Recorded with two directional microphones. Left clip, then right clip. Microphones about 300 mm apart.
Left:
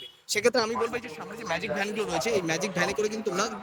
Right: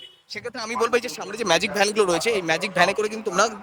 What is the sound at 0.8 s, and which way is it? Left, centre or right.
A man's voice, centre.